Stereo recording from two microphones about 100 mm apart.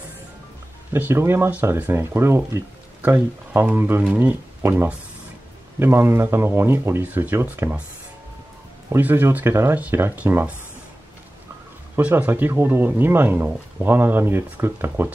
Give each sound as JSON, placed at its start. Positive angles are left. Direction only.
{"t": 0.9, "sound": "speech", "side_deg": -20}
{"t": 8.9, "sound": "speech", "side_deg": -20}
{"t": 11.9, "sound": "speech", "side_deg": -15}